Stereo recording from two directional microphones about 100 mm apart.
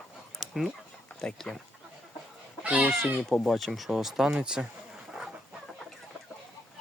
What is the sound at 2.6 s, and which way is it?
Speech, 15° right (ahead or behind).